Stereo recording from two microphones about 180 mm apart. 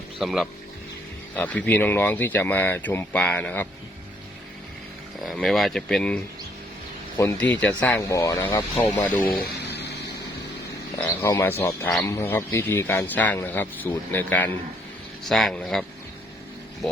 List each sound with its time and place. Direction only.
0.2 s speech: centre (ahead or behind)
5.2 s speech: centre (ahead or behind)
9.3 s a sound: 60° left (ahead or behind)
10.9 s speech: 15° left (ahead or behind)